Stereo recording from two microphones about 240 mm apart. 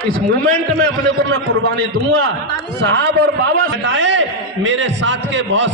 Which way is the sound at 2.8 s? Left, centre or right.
Right.